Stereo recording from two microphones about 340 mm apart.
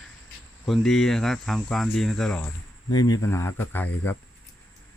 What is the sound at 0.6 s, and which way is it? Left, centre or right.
Speech, centre.